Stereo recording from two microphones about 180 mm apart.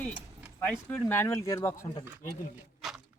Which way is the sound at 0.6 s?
10° left (ahead or behind).